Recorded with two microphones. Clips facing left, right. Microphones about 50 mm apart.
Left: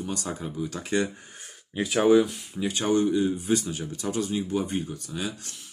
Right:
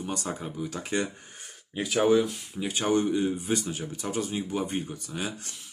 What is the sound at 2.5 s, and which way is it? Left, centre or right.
Speech, centre.